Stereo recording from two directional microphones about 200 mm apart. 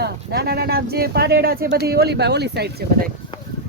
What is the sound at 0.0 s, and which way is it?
Speech, 50° right (ahead or behind).